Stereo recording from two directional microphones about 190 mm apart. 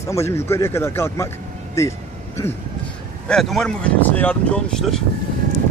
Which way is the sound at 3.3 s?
Centre (ahead or behind).